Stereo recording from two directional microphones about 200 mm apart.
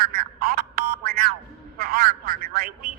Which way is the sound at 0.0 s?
50° right (ahead or behind).